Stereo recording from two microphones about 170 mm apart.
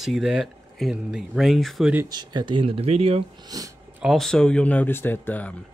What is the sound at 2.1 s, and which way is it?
Speech, 25° right (ahead or behind).